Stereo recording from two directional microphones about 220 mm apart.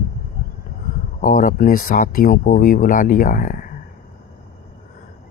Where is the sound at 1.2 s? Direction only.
40° left (ahead or behind).